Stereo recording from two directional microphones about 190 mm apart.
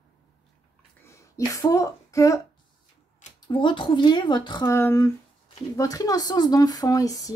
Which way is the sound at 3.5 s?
25° left (ahead or behind).